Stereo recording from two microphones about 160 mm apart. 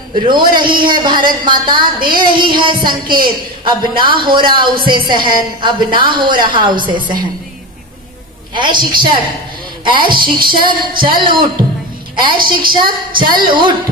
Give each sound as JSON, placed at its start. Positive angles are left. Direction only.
{"t": 0.1, "sound": "a woman's voice", "side_deg": -30}
{"t": 8.5, "sound": "a woman's voice", "side_deg": -30}
{"t": 12.7, "sound": "a woman's voice", "side_deg": -30}